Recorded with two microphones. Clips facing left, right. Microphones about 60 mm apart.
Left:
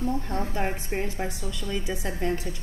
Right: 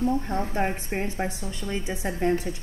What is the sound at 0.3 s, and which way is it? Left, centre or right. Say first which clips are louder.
A woman's voice: right 2 dB; right.